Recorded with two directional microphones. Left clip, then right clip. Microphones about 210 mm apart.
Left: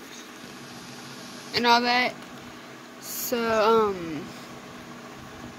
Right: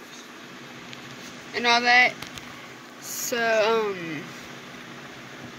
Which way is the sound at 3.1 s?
10° left (ahead or behind).